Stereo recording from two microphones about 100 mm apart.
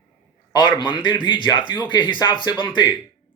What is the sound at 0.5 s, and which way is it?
Speech, 50° left (ahead or behind).